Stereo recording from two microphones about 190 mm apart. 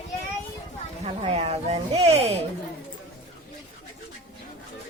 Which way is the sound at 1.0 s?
30° right (ahead or behind).